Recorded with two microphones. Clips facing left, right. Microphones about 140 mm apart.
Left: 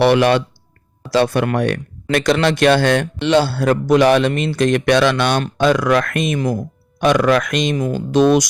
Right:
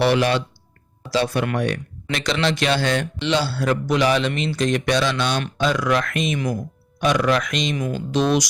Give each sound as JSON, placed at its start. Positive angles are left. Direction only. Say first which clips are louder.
{"t": 0.0, "sound": "speech", "louder": "left 5 dB", "side_deg": 60}